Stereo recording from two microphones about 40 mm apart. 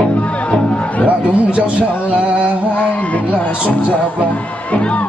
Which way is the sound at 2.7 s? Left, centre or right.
Left.